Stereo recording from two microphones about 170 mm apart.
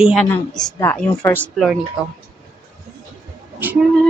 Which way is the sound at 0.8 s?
15° left (ahead or behind).